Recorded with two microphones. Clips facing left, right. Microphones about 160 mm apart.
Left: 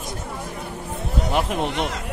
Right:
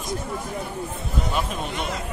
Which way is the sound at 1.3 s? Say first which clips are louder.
Left 7 dB; 70° left (ahead or behind).